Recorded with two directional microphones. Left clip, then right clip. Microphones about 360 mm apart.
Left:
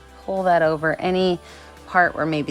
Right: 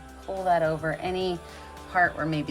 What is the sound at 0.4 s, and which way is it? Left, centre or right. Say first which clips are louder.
Speech: left 6 dB; left.